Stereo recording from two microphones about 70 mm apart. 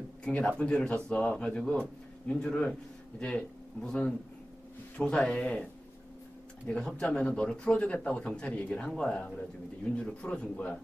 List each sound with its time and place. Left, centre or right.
0.2 s a man's voice: centre
6.7 s a man's voice: centre